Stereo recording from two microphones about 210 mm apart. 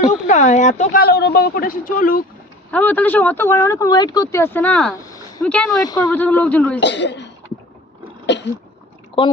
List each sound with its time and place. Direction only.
0.3 s a woman's voice: 35° left (ahead or behind)
1.0 s speech: 50° left (ahead or behind)
2.7 s speech: 10° left (ahead or behind)
4.9 s a sound: 15° left (ahead or behind)
5.4 s speech: 5° left (ahead or behind)
5.7 s speech: 20° left (ahead or behind)
6.1 s speech: 5° left (ahead or behind)
6.7 s speech: 55° left (ahead or behind)
8.3 s speech: 55° left (ahead or behind)
9.2 s speech: 20° left (ahead or behind)